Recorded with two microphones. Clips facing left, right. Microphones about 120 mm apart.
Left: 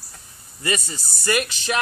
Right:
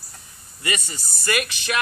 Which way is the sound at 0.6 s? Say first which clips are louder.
Left 3 dB; 35° left (ahead or behind).